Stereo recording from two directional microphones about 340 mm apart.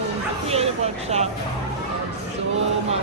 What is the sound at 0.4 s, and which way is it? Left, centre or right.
Bow-wow, centre.